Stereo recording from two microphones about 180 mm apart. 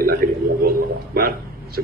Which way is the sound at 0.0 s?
55° right (ahead or behind).